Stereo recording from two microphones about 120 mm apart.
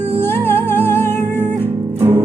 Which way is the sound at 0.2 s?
20° left (ahead or behind).